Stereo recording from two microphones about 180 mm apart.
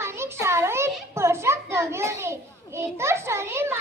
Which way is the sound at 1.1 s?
15° right (ahead or behind).